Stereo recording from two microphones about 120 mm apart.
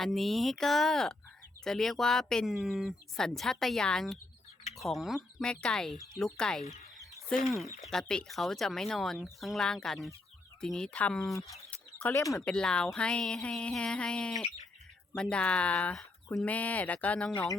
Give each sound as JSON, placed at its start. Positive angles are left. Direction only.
{"t": 0.0, "sound": "speech", "side_deg": 0}
{"t": 7.8, "sound": "speech", "side_deg": 5}
{"t": 12.1, "sound": "speech", "side_deg": 25}
{"t": 12.5, "sound": "speech", "side_deg": 5}